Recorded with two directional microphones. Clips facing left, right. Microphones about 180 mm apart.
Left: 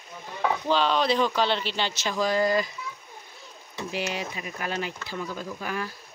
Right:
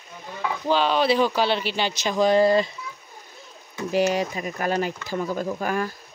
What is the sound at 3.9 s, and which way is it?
Speech, 40° right (ahead or behind).